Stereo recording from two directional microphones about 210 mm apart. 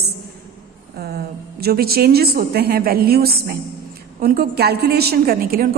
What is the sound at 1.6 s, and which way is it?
A woman's voice, 45° right (ahead or behind).